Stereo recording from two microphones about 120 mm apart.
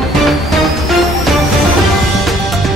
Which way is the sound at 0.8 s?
Centre (ahead or behind).